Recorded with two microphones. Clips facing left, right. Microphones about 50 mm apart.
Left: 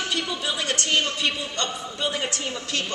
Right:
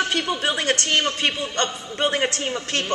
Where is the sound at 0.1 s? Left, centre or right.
Right.